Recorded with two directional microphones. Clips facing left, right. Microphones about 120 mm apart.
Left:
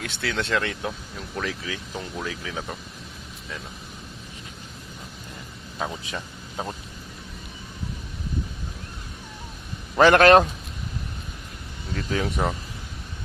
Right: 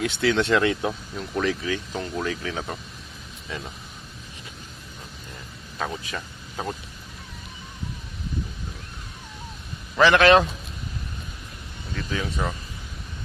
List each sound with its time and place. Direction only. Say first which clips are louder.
0.0 s speech: right 7 dB; centre (ahead or behind)
5.8 s speech: even; 20° left (ahead or behind)
10.0 s speech: left 2 dB; 45° left (ahead or behind)
11.9 s speech: left 3 dB; 45° left (ahead or behind)